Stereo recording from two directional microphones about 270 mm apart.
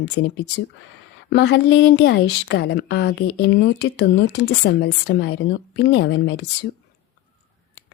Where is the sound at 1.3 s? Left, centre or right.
Left.